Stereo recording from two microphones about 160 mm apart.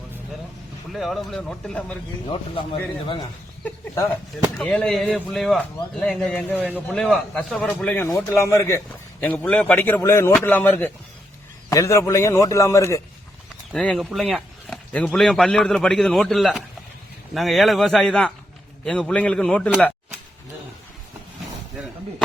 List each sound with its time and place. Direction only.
0.9 s speech: centre (ahead or behind)
2.2 s speech: 35° left (ahead or behind)
3.6 s a man's voice: 10° left (ahead or behind)
13.7 s speech: 5° left (ahead or behind)